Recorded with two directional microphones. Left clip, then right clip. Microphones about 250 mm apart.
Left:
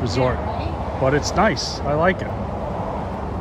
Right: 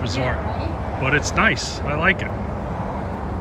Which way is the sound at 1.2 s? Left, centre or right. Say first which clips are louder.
Left 1 dB; centre.